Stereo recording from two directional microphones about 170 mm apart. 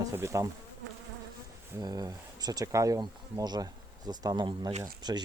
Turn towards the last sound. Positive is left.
turn(degrees=-25)  # may be behind; listen again after turning